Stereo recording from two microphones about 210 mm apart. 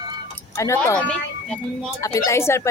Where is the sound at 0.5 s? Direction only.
10° left (ahead or behind).